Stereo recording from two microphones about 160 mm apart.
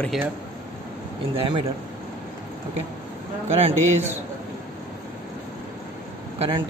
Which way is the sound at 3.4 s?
40° right (ahead or behind).